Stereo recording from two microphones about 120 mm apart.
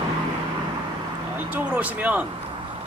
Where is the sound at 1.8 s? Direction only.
10° right (ahead or behind).